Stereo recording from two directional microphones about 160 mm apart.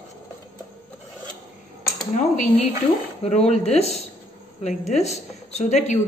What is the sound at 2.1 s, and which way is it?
A woman's voice, 50° left (ahead or behind).